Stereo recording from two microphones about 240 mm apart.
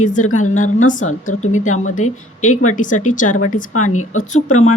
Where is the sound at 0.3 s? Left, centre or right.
Left.